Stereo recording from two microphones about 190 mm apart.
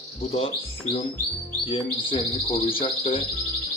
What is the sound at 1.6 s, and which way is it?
Speech, 25° left (ahead or behind).